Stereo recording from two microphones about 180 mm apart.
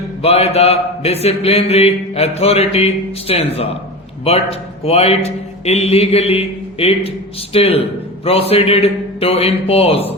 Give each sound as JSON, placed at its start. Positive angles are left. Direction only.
{"t": 0.2, "sound": "speech", "side_deg": 35}